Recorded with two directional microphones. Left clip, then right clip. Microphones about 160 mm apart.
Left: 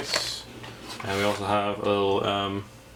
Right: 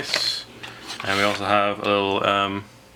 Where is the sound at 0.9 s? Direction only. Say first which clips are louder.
Right 5 dB; 25° right (ahead or behind).